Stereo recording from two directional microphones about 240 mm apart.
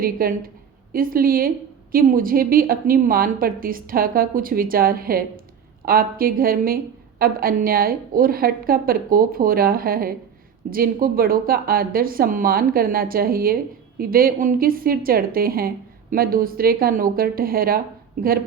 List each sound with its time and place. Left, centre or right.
0.0 s a woman's voice: right